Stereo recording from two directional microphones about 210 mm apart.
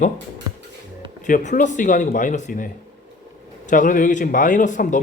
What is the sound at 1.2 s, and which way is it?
Speech, 35° left (ahead or behind).